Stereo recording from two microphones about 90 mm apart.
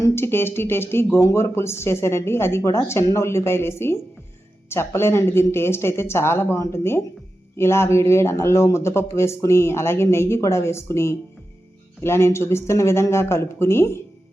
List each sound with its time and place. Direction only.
0.0 s a woman's voice: 25° left (ahead or behind)